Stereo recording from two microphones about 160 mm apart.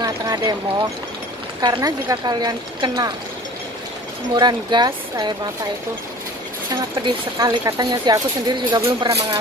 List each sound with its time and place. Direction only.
0.0 s a sound: 25° right (ahead or behind)
1.6 s speech: 25° right (ahead or behind)
4.4 s speech: 25° right (ahead or behind)
7.0 s speech: 25° right (ahead or behind)